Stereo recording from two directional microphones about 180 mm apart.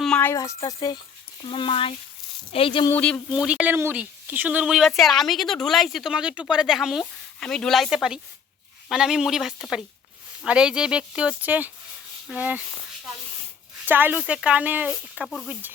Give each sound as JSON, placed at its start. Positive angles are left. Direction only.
{"t": 0.0, "sound": "speech", "side_deg": 5}
{"t": 2.9, "sound": "speech", "side_deg": 5}
{"t": 3.3, "sound": "a woman's voice", "side_deg": -5}
{"t": 13.8, "sound": "speech", "side_deg": -10}